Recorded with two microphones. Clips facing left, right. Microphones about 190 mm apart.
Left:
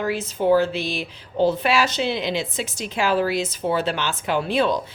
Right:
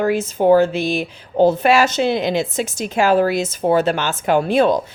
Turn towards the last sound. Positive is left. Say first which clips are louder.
# right 6 dB
turn(degrees=-45)  # may be behind; listen again after turning